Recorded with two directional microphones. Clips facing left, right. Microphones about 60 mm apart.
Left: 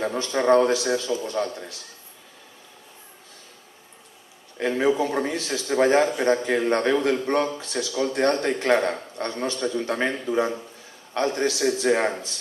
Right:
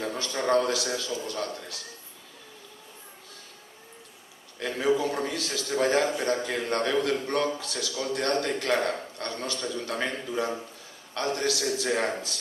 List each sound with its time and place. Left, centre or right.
0.0 s a man's voice: left
4.6 s a man's voice: left